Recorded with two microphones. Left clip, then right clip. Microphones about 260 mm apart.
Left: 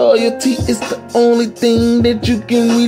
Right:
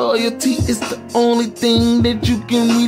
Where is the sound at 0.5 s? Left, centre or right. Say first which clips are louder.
Left 3 dB; centre.